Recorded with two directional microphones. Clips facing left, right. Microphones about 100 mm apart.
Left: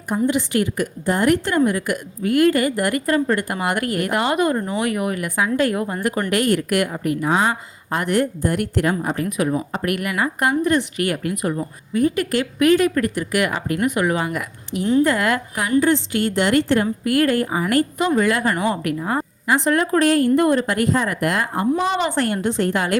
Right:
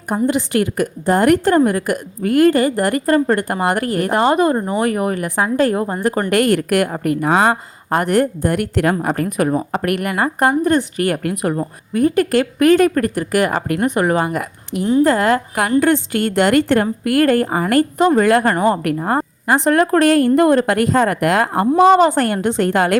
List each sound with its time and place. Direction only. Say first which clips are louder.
0.1 s a woman's voice: right 3 dB; 45° right (ahead or behind)
6.3 s a woman's voice: right 4 dB; 55° right (ahead or behind)
7.9 s a woman's voice: right 4 dB; 45° right (ahead or behind)
11.2 s a woman's voice: right 3 dB; 55° right (ahead or behind); by 15.4 s 35° right (ahead or behind)
15.8 s a woman's voice: right 3 dB; 55° right (ahead or behind)
18.8 s a woman's voice: right 4 dB; 50° right (ahead or behind)
22.4 s a woman's voice: right 4 dB; 60° right (ahead or behind)